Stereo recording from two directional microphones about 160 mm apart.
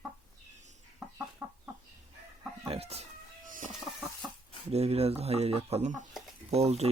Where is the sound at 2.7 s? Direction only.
40° right (ahead or behind).